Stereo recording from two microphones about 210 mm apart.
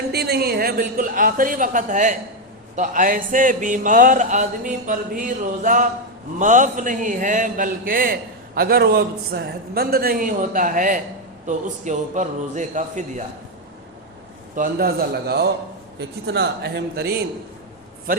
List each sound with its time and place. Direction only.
0.1 s a man's voice: 50° right (ahead or behind)
14.5 s speech: 45° right (ahead or behind)